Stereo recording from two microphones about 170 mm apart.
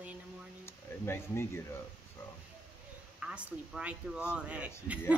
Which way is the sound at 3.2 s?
5° right (ahead or behind).